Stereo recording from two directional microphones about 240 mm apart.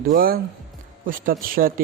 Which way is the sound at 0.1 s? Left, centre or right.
Right.